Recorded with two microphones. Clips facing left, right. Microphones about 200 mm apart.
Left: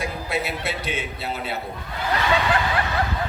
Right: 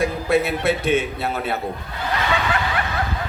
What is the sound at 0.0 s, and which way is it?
A man's voice, 55° right (ahead or behind).